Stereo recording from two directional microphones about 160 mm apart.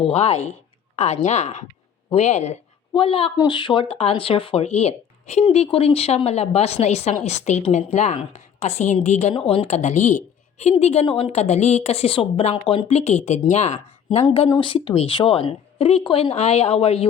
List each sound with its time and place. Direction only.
0.0 s a woman's voice: 40° left (ahead or behind)
9.3 s a woman's voice: 35° left (ahead or behind)
14.5 s a woman's voice: 30° left (ahead or behind)